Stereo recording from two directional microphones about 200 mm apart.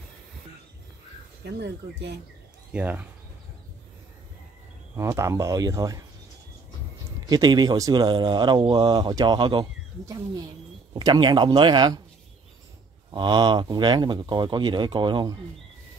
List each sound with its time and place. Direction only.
1.4 s speech: 60° right (ahead or behind)
2.7 s speech: 5° right (ahead or behind)
4.9 s speech: 15° right (ahead or behind)
7.2 s speech: 20° right (ahead or behind)
13.1 s speech: 25° right (ahead or behind)